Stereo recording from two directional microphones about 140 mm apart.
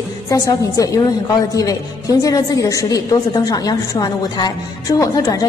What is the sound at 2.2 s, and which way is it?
A woman's voice, 25° left (ahead or behind).